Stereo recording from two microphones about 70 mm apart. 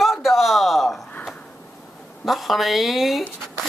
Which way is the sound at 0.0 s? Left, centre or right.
Centre.